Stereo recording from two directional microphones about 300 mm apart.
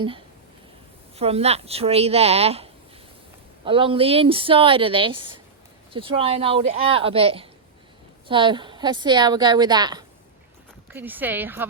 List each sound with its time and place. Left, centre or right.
1.1 s a woman's voice: centre